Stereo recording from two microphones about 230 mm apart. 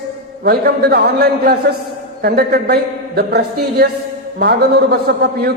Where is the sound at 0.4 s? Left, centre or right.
Right.